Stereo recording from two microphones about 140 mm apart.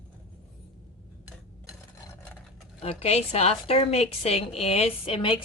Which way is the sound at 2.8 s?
50° left (ahead or behind).